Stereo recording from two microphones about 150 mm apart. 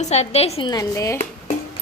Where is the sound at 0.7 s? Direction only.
25° left (ahead or behind).